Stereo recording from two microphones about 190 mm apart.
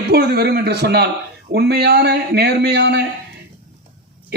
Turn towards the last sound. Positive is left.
turn(degrees=-60)  # may be behind; listen again after turning